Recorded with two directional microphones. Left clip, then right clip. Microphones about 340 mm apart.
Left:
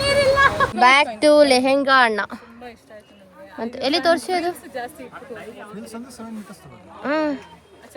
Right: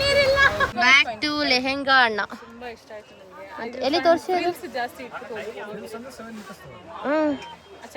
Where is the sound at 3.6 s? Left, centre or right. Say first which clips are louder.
Left 1 dB; left.